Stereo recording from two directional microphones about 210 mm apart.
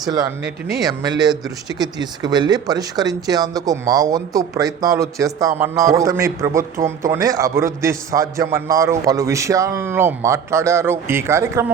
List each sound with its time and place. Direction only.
0.8 s speech: 20° right (ahead or behind)